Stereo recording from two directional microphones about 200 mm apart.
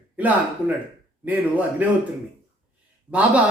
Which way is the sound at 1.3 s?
10° right (ahead or behind).